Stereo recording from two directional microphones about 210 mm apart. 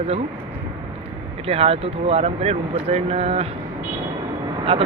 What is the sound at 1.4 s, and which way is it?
Speech, 30° right (ahead or behind).